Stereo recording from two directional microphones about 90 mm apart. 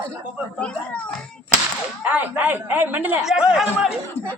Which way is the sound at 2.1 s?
15° right (ahead or behind).